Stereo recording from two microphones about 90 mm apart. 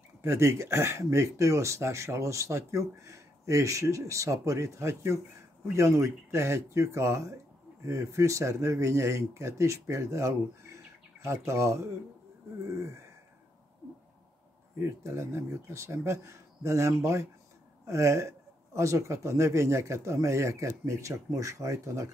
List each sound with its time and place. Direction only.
0.2 s speech: 30° right (ahead or behind)
14.8 s speech: 30° right (ahead or behind)